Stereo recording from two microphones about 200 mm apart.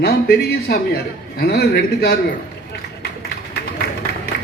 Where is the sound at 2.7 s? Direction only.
55° left (ahead or behind).